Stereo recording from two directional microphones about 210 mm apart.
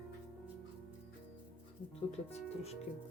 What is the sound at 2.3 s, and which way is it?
Speech, 30° left (ahead or behind).